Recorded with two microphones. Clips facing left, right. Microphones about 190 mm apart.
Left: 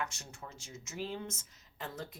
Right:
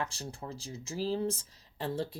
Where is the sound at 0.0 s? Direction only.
35° right (ahead or behind).